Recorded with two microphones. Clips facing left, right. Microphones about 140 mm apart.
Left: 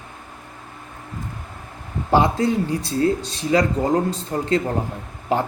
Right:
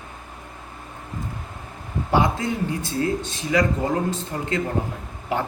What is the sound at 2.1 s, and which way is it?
Speech, 35° left (ahead or behind).